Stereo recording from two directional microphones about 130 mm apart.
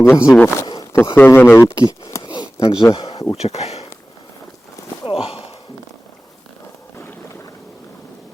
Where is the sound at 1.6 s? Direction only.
30° left (ahead or behind).